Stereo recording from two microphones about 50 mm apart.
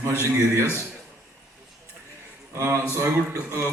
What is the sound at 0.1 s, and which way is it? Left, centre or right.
Speech, right.